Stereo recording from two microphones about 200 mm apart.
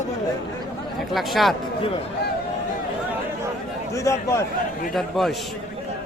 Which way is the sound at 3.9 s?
15° left (ahead or behind).